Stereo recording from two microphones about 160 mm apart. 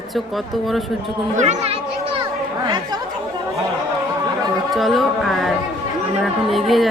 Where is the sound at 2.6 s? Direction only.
25° right (ahead or behind).